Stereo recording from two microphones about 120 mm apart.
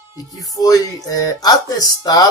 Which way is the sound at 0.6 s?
30° left (ahead or behind).